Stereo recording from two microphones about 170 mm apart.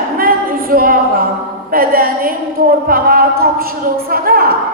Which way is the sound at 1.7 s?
60° right (ahead or behind).